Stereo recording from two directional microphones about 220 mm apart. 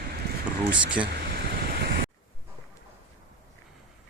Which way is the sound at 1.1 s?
45° right (ahead or behind).